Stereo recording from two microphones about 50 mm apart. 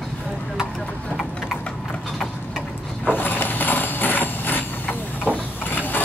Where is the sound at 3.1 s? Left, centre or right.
Left.